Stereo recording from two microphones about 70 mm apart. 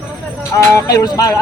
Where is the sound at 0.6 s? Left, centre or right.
Left.